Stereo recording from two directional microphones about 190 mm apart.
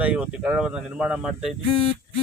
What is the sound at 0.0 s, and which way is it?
Speech, 5° right (ahead or behind).